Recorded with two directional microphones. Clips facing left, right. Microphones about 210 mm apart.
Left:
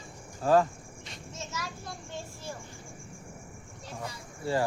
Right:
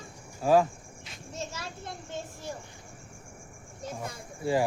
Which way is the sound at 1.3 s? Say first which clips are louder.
Right 2 dB; 30° right (ahead or behind).